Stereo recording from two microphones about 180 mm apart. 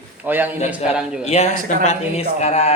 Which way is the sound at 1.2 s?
35° left (ahead or behind).